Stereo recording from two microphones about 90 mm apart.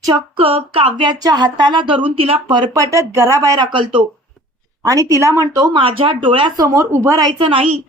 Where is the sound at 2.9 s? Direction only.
30° right (ahead or behind).